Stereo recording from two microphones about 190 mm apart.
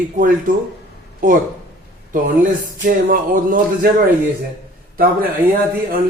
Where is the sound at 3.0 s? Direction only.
50° right (ahead or behind).